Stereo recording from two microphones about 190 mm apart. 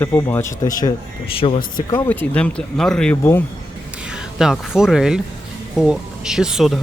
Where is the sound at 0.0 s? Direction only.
10° left (ahead or behind); by 1.6 s 30° left (ahead or behind).